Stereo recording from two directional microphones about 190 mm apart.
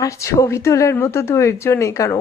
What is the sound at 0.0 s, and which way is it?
A woman's voice, 15° left (ahead or behind).